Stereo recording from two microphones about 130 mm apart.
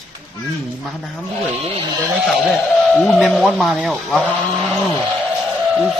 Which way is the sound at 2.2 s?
Centre (ahead or behind).